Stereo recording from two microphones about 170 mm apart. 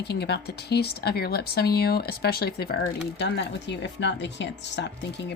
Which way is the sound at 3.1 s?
90° left.